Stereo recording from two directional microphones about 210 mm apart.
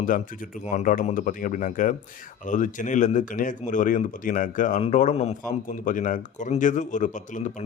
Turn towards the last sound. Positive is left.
turn(degrees=35)  # may be behind; listen again after turning